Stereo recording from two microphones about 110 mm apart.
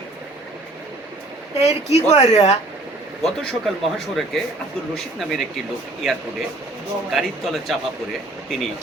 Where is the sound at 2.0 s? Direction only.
75° left (ahead or behind).